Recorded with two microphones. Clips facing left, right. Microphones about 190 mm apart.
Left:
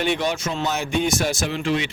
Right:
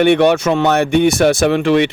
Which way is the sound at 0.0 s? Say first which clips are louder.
Right 12 dB; 65° right (ahead or behind).